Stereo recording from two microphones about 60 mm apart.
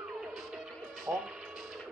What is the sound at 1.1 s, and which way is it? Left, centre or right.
Speech, right.